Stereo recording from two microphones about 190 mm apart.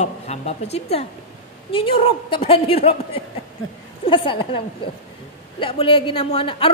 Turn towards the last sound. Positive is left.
turn(degrees=30)  # may be behind; listen again after turning